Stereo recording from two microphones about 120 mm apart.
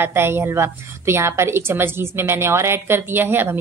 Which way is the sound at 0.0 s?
20° right (ahead or behind).